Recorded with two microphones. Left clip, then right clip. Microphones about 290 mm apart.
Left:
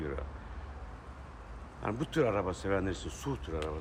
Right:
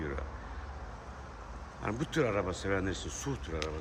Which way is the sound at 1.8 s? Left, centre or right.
Centre.